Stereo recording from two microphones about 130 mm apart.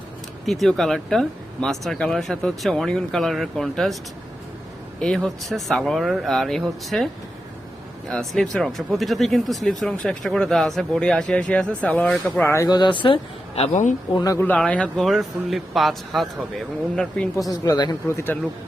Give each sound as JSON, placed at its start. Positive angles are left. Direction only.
{"t": 0.4, "sound": "speech", "side_deg": 0}
{"t": 4.9, "sound": "speech", "side_deg": 5}
{"t": 8.1, "sound": "speech", "side_deg": 0}
{"t": 12.6, "sound": "speech", "side_deg": 35}
{"t": 13.6, "sound": "speech", "side_deg": 70}
{"t": 14.3, "sound": "speech", "side_deg": 15}
{"t": 17.5, "sound": "speech", "side_deg": 30}
{"t": 18.1, "sound": "speech", "side_deg": 20}